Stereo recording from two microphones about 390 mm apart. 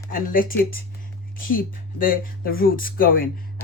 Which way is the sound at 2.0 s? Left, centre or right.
Left.